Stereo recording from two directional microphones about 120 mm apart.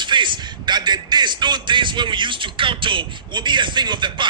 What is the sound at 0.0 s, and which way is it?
Speech, 40° right (ahead or behind).